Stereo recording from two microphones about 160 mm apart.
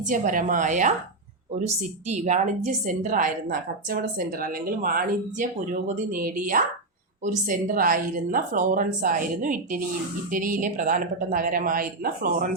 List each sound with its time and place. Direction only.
0.1 s a woman's voice: 55° right (ahead or behind)